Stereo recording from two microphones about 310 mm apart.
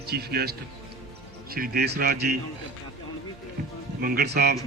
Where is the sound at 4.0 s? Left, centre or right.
Right.